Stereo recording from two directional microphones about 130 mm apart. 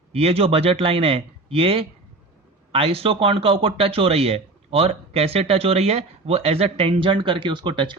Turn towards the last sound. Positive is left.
turn(degrees=-35)  # may be behind; listen again after turning